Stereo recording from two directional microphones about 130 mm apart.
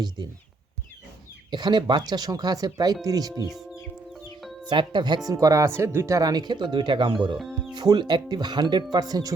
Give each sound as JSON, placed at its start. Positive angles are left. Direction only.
{"t": 1.5, "sound": "speech", "side_deg": -35}
{"t": 4.1, "sound": "music", "side_deg": 0}
{"t": 4.7, "sound": "speech", "side_deg": -40}